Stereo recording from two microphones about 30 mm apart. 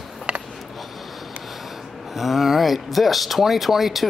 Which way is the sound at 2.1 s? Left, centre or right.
Centre.